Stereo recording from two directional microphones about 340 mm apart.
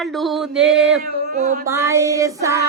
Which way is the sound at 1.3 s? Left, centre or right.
Right.